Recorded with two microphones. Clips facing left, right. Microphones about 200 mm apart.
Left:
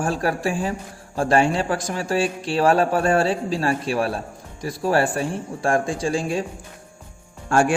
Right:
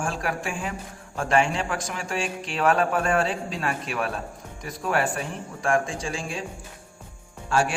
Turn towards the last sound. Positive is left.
turn(degrees=50)  # may be behind; listen again after turning